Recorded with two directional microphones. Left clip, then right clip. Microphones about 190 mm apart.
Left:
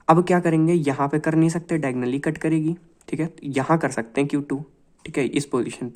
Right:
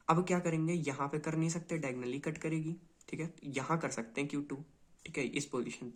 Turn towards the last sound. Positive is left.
turn(degrees=45)  # may be behind; listen again after turning